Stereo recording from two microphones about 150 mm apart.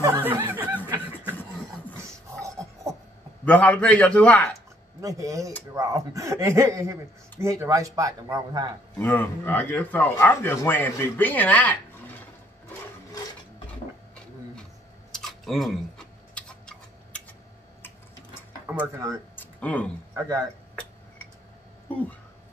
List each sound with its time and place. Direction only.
0.0 s a sound: 15° right (ahead or behind)
2.0 s a sound: 20° right (ahead or behind)
3.4 s speech: 10° left (ahead or behind)
5.0 s speech: 20° right (ahead or behind)
8.9 s speech: 15° left (ahead or behind)
15.1 s tick-tock: centre (ahead or behind)
18.7 s speech: 15° right (ahead or behind)
19.3 s a sound: 10° left (ahead or behind)
20.2 s speech: 20° right (ahead or behind)